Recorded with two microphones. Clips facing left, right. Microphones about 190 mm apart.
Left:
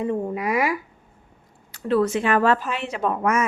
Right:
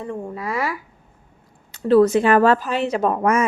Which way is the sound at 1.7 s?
35° right (ahead or behind).